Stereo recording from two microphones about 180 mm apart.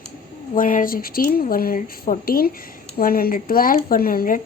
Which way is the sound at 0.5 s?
50° left (ahead or behind).